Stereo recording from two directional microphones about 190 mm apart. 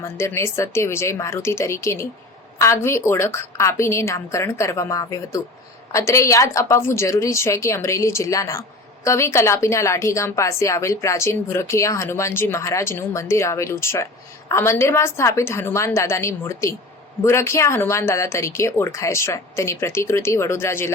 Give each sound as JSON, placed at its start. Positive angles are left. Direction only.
{"t": 0.0, "sound": "a woman's voice", "side_deg": 15}